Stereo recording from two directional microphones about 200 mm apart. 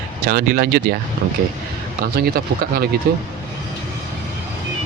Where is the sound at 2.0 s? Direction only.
50° right (ahead or behind).